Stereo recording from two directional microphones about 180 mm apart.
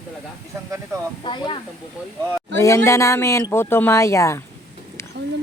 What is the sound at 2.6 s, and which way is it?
Speech, 15° left (ahead or behind).